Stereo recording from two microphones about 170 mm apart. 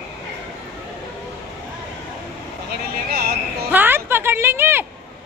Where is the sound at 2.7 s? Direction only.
65° right (ahead or behind).